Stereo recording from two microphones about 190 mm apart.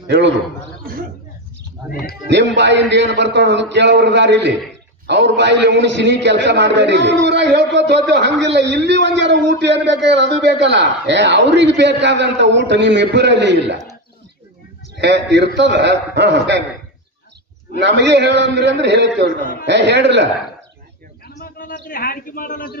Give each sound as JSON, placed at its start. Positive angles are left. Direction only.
{"t": 1.9, "sound": "speech", "side_deg": 50}
{"t": 2.3, "sound": "a man's voice", "side_deg": -70}
{"t": 15.0, "sound": "a man's voice", "side_deg": -65}
{"t": 17.7, "sound": "a man's voice", "side_deg": -65}
{"t": 21.4, "sound": "a man's voice", "side_deg": 45}